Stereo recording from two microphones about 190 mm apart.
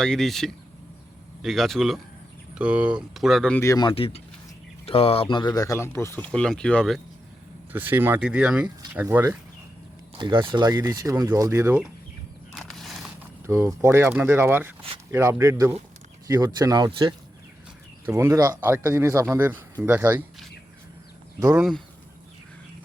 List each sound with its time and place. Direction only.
0.0 s speech: centre (ahead or behind)
3.6 s speech: 20° left (ahead or behind); by 7.0 s 5° left (ahead or behind)
7.7 s speech: 10° right (ahead or behind)
10.2 s speech: 25° right (ahead or behind)
12.5 s a sound: centre (ahead or behind)
13.5 s speech: 15° right (ahead or behind)